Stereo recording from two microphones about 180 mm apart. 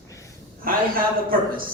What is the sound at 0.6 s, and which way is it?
Speech, 55° right (ahead or behind).